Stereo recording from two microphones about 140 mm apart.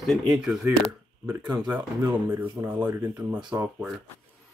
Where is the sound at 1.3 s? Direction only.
25° right (ahead or behind).